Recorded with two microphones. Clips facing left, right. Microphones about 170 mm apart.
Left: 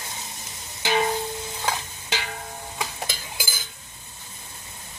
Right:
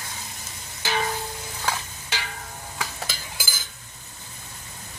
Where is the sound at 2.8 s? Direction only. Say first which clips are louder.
Left 1 dB; 20° left (ahead or behind).